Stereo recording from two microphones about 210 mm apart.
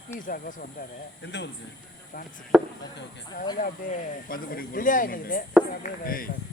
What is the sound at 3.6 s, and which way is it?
Speech, 40° left (ahead or behind).